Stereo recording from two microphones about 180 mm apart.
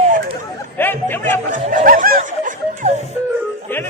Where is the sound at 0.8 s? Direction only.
10° left (ahead or behind).